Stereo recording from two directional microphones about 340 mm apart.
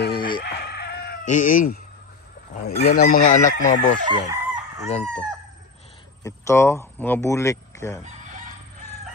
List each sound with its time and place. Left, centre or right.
0.4 s chicken: left
2.6 s chicken: left
4.0 s chicken: centre
5.0 s speech: centre